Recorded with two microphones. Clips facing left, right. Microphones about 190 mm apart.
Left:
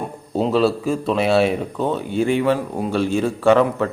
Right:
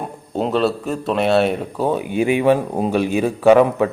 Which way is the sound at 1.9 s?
15° right (ahead or behind).